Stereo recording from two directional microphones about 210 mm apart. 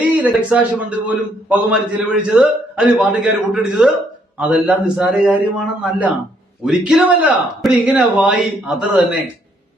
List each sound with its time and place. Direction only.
0.0 s a man's voice: 5° right (ahead or behind)